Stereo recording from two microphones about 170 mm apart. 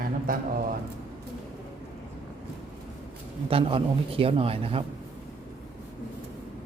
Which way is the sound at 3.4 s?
30° right (ahead or behind).